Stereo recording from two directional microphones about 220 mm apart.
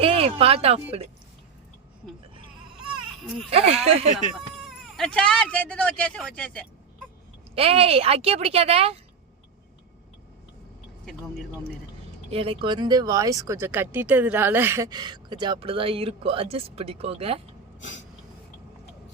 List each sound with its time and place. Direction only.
0.0 s speech: 25° right (ahead or behind)
3.5 s speech: 25° right (ahead or behind)
4.4 s speech: centre (ahead or behind)
7.5 s speech: 25° right (ahead or behind)
12.3 s speech: 25° right (ahead or behind)